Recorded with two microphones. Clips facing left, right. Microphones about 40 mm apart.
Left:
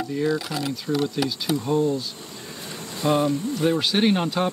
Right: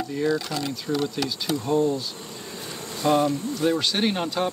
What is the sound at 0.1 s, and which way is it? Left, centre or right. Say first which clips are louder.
Speech: even; centre.